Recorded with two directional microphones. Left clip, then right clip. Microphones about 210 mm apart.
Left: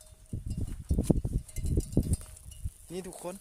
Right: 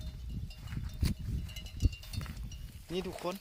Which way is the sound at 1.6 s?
85° left.